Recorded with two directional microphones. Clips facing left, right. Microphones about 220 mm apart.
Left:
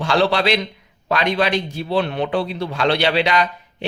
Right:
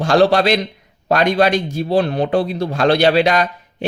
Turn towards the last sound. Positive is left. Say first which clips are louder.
# right 5 dB
turn(degrees=-45)  # may be behind; listen again after turning